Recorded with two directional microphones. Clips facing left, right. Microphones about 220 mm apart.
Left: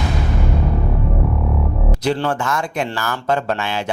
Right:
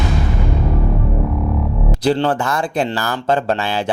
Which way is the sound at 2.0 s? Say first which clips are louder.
Right 4 dB; 35° right (ahead or behind).